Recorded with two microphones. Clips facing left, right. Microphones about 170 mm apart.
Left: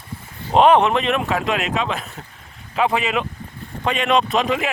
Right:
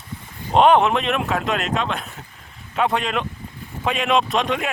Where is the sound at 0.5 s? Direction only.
Centre (ahead or behind).